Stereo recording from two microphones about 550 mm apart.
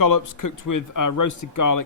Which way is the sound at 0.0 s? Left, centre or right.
Left.